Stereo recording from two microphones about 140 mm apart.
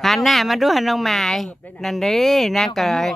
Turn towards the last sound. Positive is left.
turn(degrees=0)  # may be behind; listen again after turning